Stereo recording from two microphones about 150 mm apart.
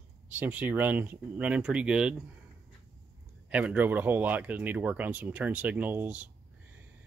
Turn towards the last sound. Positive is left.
turn(degrees=-10)  # may be behind; listen again after turning